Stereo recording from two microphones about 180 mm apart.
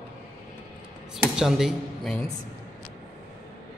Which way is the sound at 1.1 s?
5° right (ahead or behind).